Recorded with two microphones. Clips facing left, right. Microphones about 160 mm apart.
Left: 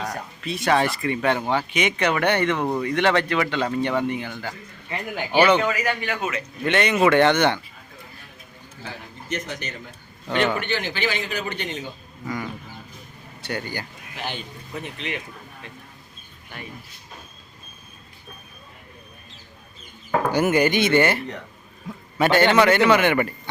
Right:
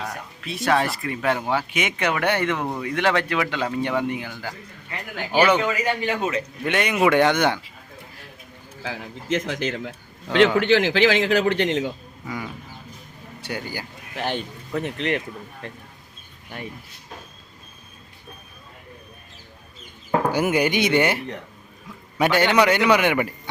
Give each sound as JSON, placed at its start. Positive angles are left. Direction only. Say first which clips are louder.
{"t": 0.4, "sound": "a man's voice", "louder": "left 1 dB", "side_deg": 0}
{"t": 5.8, "sound": "speech", "louder": "right 2 dB", "side_deg": -30}
{"t": 6.7, "sound": "a man's voice", "louder": "left 1 dB", "side_deg": -10}
{"t": 8.8, "sound": "a man's voice", "louder": "right 5 dB", "side_deg": -90}
{"t": 12.2, "sound": "bird", "louder": "left 2 dB", "side_deg": -5}
{"t": 13.4, "sound": "a man's voice", "louder": "left 1 dB", "side_deg": -10}
{"t": 14.7, "sound": "speech", "louder": "right 7 dB", "side_deg": -65}
{"t": 20.3, "sound": "a man's voice", "louder": "left 4 dB", "side_deg": -10}